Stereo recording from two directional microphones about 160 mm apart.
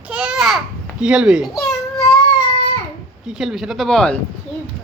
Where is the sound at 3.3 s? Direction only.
5° right (ahead or behind).